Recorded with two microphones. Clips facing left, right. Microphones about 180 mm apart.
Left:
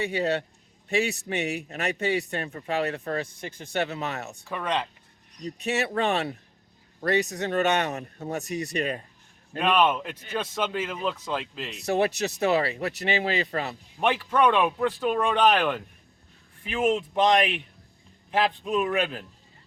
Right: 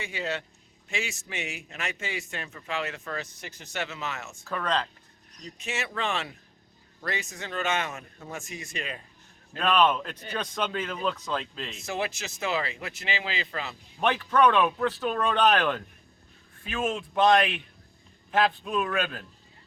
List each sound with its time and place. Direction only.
0.0 s a man's voice: 35° left (ahead or behind)
4.4 s speech: 10° left (ahead or behind)
5.4 s speech: 35° left (ahead or behind)
9.6 s speech: 10° left (ahead or behind)
11.9 s speech: 35° left (ahead or behind)
14.0 s a man's voice: 10° left (ahead or behind)